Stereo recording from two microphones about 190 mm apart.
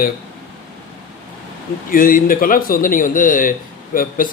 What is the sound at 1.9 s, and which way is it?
A man's voice, 50° left (ahead or behind).